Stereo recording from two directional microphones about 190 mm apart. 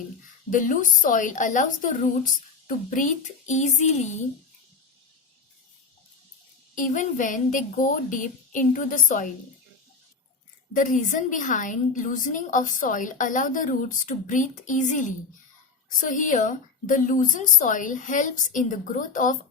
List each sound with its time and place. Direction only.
0.5 s a woman's voice: 45° left (ahead or behind)
6.7 s a woman's voice: 45° left (ahead or behind)
10.8 s a woman's voice: 40° left (ahead or behind)